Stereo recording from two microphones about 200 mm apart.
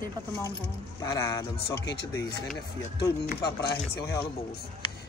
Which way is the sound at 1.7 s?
60° left (ahead or behind).